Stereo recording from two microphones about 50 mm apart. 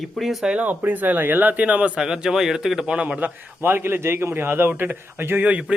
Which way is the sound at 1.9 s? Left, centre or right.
Centre.